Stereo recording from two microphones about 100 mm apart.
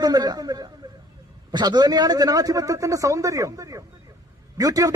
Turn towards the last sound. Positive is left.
turn(degrees=-35)  # may be behind; listen again after turning